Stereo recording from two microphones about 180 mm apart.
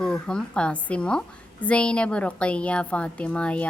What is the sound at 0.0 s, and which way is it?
Speech, 5° left (ahead or behind).